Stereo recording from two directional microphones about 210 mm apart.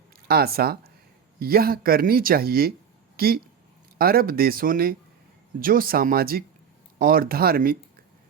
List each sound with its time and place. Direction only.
0.3 s speech: 45° right (ahead or behind)